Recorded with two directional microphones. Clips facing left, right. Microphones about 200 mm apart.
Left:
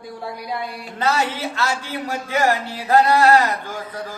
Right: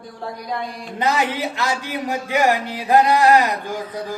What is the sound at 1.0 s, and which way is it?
A man's voice, 15° right (ahead or behind).